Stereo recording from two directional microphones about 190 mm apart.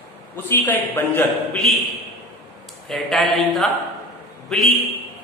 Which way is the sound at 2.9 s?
Centre (ahead or behind).